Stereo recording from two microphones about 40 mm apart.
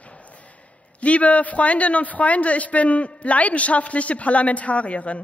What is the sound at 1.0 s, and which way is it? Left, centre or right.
A man's voice, left.